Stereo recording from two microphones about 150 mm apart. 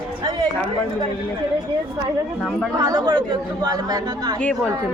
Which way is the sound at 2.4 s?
Centre (ahead or behind).